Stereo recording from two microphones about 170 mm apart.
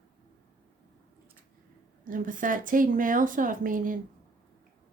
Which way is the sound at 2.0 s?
50° right (ahead or behind).